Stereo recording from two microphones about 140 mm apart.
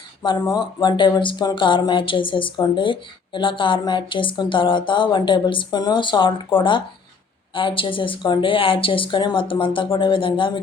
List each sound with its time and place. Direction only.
0.2 s speech: 30° left (ahead or behind)